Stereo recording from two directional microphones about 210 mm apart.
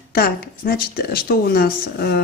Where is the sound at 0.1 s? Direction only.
45° left (ahead or behind).